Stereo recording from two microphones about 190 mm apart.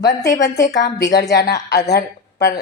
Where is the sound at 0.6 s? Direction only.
55° left (ahead or behind).